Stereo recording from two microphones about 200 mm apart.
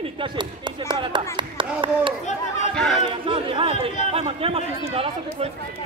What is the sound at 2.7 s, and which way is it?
Speech, centre (ahead or behind).